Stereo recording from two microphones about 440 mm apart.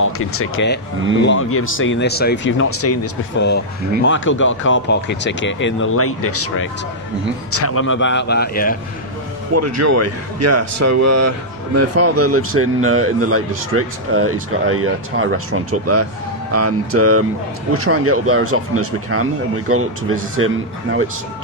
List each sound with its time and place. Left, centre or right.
0.0 s speech: left
9.5 s speech: right